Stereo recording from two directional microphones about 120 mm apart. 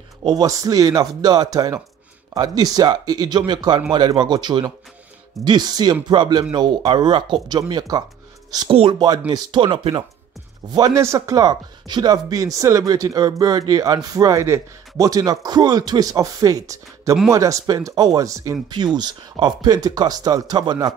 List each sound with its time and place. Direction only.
0.2 s speech: 35° right (ahead or behind)
8.6 s speech: 50° right (ahead or behind)
10.7 s speech: 30° right (ahead or behind)